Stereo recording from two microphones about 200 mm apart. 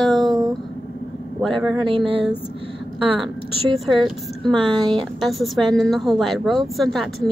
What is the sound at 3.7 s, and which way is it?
A woman's voice, centre (ahead or behind).